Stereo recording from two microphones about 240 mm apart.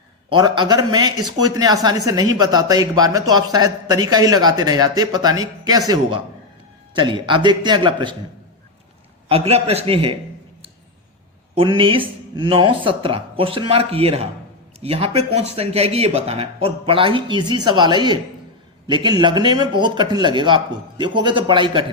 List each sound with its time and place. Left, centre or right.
0.3 s speech: centre
6.9 s speech: centre
9.3 s speech: right
11.5 s speech: right